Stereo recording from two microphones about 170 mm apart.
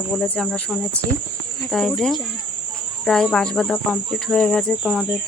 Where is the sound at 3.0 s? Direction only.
5° left (ahead or behind).